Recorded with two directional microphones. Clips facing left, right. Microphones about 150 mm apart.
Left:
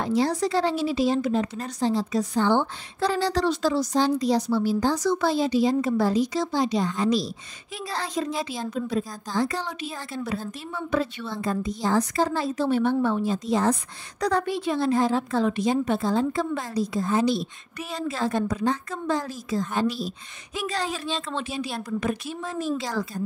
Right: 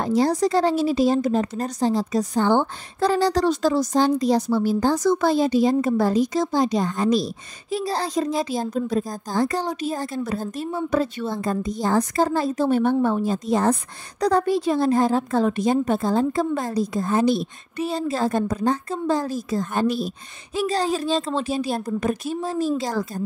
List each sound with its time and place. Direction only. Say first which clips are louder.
0.0 s speech: right 4 dB; 45° right (ahead or behind)
7.7 s speech: right 6 dB; 35° right (ahead or behind)
14.2 s speech: right 5 dB; 40° right (ahead or behind)
17.7 s a woman's voice: right 6 dB; 30° right (ahead or behind); by 20.1 s 50° right (ahead or behind)
20.5 s a woman's voice: right 7 dB; 35° right (ahead or behind)